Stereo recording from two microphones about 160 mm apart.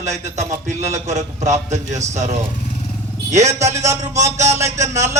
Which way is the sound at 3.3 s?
45° right (ahead or behind).